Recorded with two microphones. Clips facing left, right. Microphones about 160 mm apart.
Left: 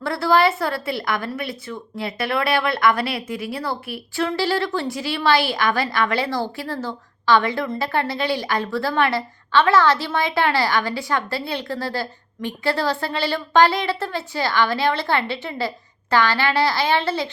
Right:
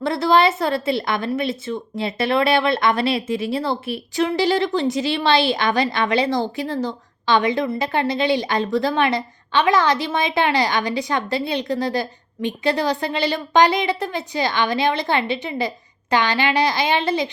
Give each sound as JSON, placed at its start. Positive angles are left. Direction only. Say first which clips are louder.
{"t": 0.0, "sound": "speech", "louder": "right 1 dB", "side_deg": -20}